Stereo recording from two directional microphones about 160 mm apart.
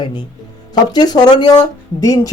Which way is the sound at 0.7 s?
25° left (ahead or behind).